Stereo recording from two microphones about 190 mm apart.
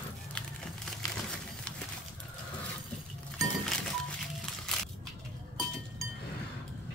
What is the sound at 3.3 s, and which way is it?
Chink, centre (ahead or behind).